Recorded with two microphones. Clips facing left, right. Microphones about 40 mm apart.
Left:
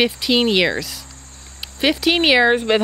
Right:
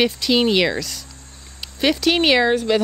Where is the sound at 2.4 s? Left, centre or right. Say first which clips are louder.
Left 2 dB; left.